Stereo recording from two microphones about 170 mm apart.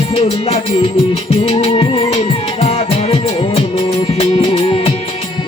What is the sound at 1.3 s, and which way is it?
Music, 35° left (ahead or behind).